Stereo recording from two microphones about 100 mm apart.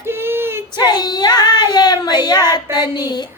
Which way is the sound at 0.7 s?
45° left (ahead or behind).